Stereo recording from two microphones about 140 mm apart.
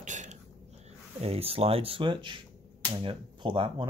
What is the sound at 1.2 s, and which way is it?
Speech, 45° right (ahead or behind).